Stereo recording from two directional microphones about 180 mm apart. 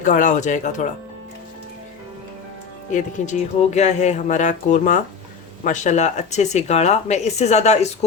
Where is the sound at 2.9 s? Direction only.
40° left (ahead or behind).